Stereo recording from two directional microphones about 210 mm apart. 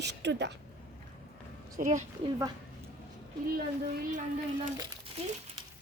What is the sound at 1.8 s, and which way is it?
Speech, 35° right (ahead or behind).